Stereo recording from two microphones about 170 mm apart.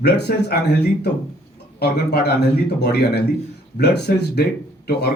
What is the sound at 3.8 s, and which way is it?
Speech, 75° left (ahead or behind).